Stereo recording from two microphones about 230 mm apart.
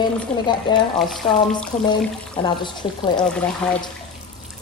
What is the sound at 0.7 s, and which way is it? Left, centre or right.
Speech, centre.